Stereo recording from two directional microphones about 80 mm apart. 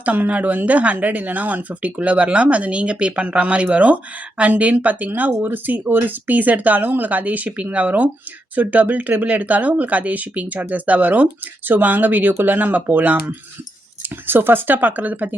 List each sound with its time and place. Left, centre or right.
0.0 s speech: centre